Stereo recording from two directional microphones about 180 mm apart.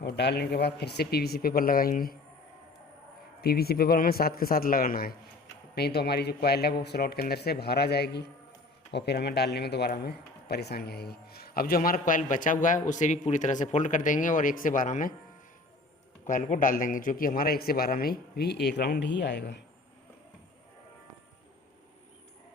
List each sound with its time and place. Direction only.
0.0 s speech: 70° left (ahead or behind); by 2.1 s 50° left (ahead or behind)
3.4 s speech: 60° left (ahead or behind)
16.2 s speech: 45° left (ahead or behind); by 19.6 s 75° left (ahead or behind)